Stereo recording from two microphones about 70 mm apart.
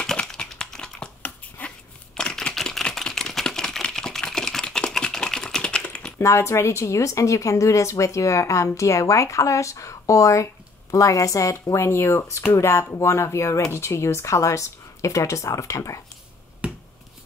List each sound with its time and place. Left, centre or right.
0.0 s typing: centre
1.6 s a sound: left
2.1 s camera: centre
6.1 s speech: left
16.6 s finger snapping: centre